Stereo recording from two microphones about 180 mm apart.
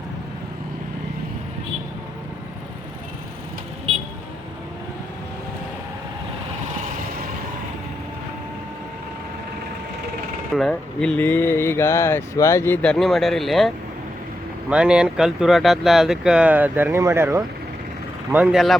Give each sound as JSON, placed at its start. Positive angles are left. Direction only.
{"t": 10.5, "sound": "speech", "side_deg": 5}
{"t": 18.4, "sound": "speech", "side_deg": 0}